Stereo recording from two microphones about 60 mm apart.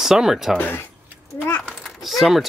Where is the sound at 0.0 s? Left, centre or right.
Centre.